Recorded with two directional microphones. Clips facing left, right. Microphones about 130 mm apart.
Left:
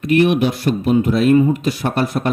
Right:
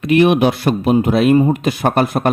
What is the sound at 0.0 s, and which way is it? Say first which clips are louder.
Speech: right 2 dB; 85° right.